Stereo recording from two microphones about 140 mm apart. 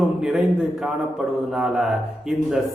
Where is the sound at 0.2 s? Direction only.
5° right (ahead or behind).